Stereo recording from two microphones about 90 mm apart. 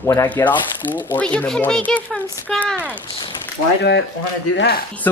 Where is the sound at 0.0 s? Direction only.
30° left (ahead or behind).